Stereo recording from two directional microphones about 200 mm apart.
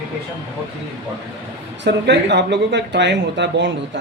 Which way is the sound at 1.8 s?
60° right (ahead or behind).